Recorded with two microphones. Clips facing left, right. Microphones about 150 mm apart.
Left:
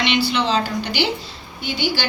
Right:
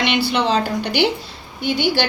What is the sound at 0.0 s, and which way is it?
Speech, 55° right (ahead or behind).